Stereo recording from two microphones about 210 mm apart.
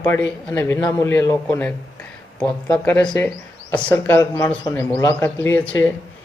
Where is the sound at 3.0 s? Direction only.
20° left (ahead or behind).